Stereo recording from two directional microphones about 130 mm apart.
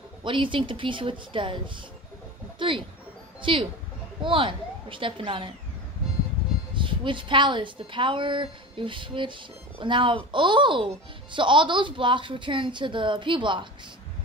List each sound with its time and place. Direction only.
0.2 s a woman's voice: 40° right (ahead or behind)
2.6 s a woman's voice: 40° right (ahead or behind)
6.7 s a woman's voice: 40° right (ahead or behind)